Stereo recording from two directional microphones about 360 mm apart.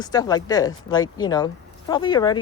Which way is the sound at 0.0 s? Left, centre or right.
Centre.